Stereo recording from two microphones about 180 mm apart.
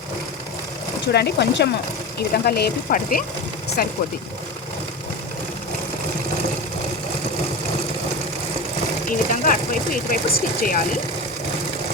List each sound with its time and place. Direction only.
1.0 s speech: 65° left (ahead or behind)
9.0 s speech: 50° left (ahead or behind)